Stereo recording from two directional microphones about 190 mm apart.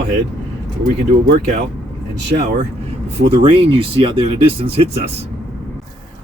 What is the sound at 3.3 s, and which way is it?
Speech, 30° right (ahead or behind).